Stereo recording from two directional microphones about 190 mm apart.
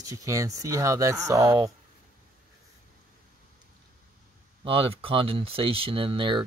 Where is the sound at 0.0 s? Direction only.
15° right (ahead or behind).